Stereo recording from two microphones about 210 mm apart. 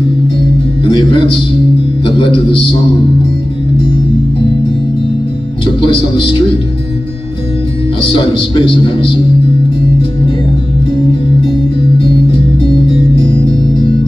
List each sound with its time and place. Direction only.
2.0 s a man's voice: 25° left (ahead or behind)
5.8 s a man's voice: 25° left (ahead or behind)
8.0 s a man's voice: 25° left (ahead or behind)
12.6 s music: 25° left (ahead or behind)